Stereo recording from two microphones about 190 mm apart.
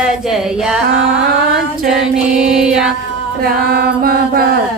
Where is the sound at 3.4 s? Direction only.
50° right (ahead or behind).